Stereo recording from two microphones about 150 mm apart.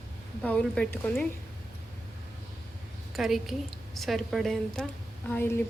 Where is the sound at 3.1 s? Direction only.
Centre (ahead or behind).